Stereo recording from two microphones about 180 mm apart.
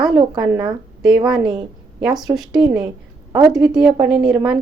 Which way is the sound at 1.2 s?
5° right (ahead or behind).